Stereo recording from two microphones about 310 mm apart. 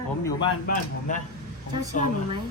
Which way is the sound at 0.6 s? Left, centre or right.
Left.